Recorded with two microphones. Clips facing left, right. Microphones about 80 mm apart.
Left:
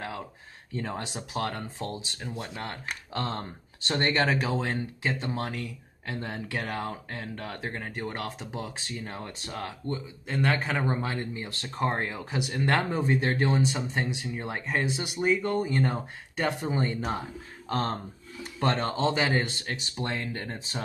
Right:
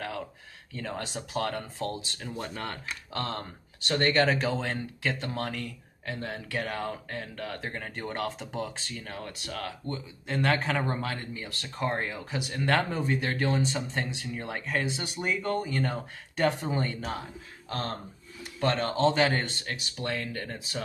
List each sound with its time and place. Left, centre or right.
0.7 s speech: left
7.7 s speech: centre
10.2 s a man's voice: centre
10.9 s speech: left
16.3 s speech: centre
16.8 s speech: left
17.6 s speech: left
19.1 s speech: centre
19.7 s speech: left